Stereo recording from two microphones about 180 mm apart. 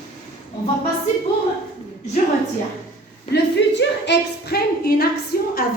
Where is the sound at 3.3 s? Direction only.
70° left (ahead or behind).